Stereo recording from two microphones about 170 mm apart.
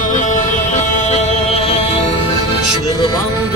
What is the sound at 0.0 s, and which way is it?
Music, 45° left (ahead or behind).